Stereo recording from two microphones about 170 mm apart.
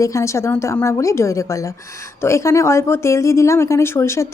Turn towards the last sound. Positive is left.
turn(degrees=15)  # may be behind; listen again after turning